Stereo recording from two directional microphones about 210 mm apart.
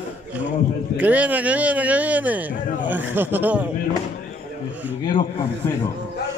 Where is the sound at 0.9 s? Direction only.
5° right (ahead or behind).